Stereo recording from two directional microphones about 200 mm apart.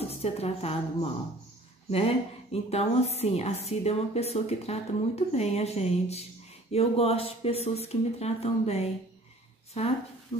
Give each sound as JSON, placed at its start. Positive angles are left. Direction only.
{"t": 0.1, "sound": "a woman's voice", "side_deg": 30}
{"t": 1.9, "sound": "a woman's voice", "side_deg": 30}